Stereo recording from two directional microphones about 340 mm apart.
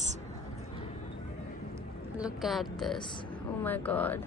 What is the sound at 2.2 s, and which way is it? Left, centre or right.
A woman's voice, centre.